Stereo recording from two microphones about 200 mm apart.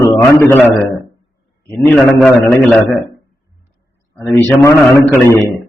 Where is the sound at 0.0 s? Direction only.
15° left (ahead or behind).